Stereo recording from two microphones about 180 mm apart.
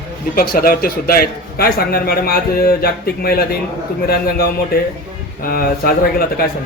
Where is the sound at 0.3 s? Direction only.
55° left (ahead or behind).